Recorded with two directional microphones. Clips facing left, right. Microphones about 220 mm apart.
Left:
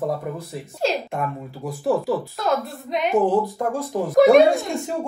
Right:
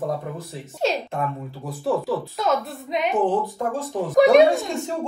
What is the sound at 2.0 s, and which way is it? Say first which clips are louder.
A woman's voice: left 1 dB; centre (ahead or behind).